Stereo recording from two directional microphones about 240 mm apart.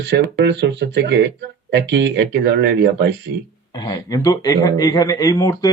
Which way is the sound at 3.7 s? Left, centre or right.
Centre.